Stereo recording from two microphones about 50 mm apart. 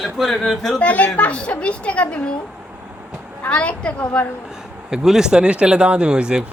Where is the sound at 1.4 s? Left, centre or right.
Left.